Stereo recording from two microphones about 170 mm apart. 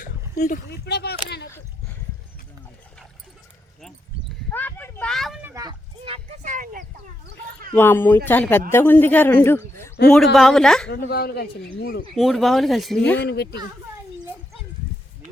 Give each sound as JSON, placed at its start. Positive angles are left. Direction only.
{"t": 0.7, "sound": "speech", "side_deg": 75}
{"t": 4.5, "sound": "speech", "side_deg": 10}
{"t": 5.4, "sound": "a sound", "side_deg": -10}
{"t": 5.6, "sound": "speech", "side_deg": -35}
{"t": 6.4, "sound": "speech", "side_deg": -50}
{"t": 7.7, "sound": "speech", "side_deg": 15}
{"t": 10.1, "sound": "speech", "side_deg": 0}
{"t": 10.8, "sound": "speech", "side_deg": 70}
{"t": 12.1, "sound": "speech", "side_deg": 0}
{"t": 13.2, "sound": "speech", "side_deg": 70}